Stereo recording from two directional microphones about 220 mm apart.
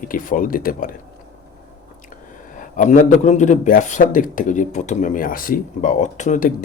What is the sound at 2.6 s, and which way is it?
A man's voice, 35° left (ahead or behind).